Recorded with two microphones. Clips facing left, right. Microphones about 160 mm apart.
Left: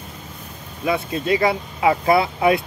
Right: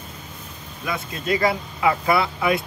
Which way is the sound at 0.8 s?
25° left (ahead or behind).